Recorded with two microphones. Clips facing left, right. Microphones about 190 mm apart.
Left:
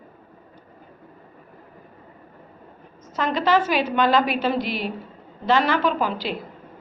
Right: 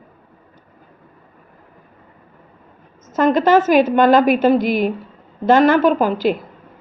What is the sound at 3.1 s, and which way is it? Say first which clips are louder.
A woman's voice: right 7 dB; 50° right (ahead or behind).